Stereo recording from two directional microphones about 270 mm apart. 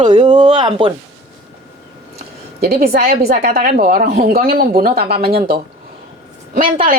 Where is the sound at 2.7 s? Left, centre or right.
Right.